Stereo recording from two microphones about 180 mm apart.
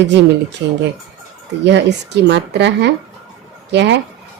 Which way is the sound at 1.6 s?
70° right (ahead or behind).